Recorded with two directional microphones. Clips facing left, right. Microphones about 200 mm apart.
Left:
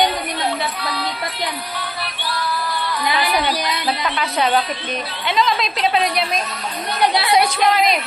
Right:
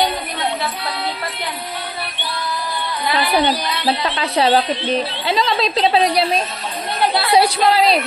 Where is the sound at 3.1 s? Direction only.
25° right (ahead or behind).